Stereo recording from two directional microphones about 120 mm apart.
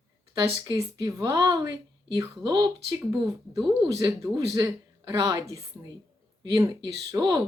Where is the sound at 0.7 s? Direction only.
25° right (ahead or behind).